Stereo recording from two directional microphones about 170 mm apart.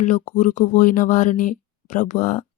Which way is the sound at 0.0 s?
45° left (ahead or behind).